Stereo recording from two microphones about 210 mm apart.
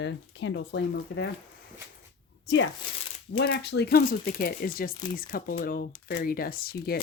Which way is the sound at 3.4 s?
50° left (ahead or behind).